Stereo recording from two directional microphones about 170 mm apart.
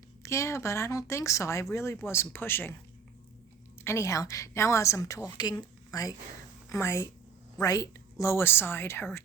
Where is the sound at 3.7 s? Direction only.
15° left (ahead or behind).